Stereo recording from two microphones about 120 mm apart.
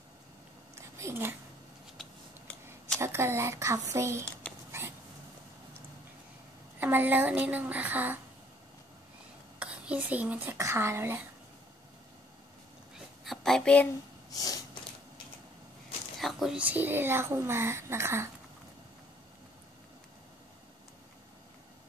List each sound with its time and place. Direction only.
0.7 s a sound: 25° right (ahead or behind)
2.0 s a sound: 5° left (ahead or behind)
3.0 s speech: 20° right (ahead or behind)
6.8 s a woman's voice: 15° right (ahead or behind)
9.6 s speech: 10° right (ahead or behind)
10.6 s speech: 25° right (ahead or behind)
12.9 s a sound: centre (ahead or behind)
14.3 s snort: 30° left (ahead or behind)
16.2 s speech: centre (ahead or behind); by 18.3 s 20° right (ahead or behind)